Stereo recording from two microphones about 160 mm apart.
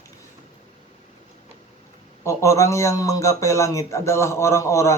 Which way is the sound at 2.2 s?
20° left (ahead or behind).